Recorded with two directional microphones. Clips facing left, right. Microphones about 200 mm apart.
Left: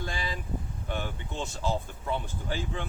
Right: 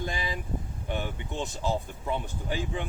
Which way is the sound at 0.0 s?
20° right (ahead or behind).